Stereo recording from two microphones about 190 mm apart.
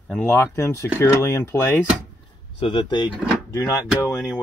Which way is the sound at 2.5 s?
25° left (ahead or behind).